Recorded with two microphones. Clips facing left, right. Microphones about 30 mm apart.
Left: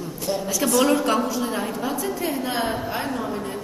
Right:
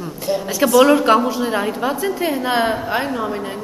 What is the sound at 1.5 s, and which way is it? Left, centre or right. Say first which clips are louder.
A woman's voice: right 6 dB; right.